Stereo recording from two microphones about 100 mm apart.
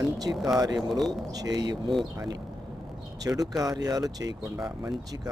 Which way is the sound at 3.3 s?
25° right (ahead or behind).